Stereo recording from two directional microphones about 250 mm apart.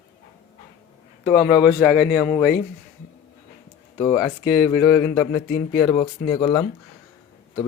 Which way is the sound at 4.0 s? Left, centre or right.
Centre.